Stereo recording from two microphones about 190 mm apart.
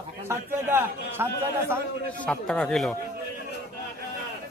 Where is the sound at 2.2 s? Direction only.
5° left (ahead or behind).